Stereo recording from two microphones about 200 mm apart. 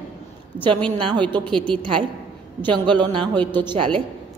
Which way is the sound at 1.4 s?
5° left (ahead or behind).